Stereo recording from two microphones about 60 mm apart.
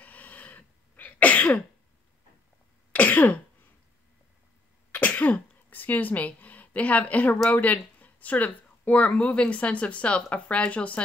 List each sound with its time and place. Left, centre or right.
0.0 s cough: left
2.9 s cough: left
4.9 s throat clearing: left
7.4 s speech: left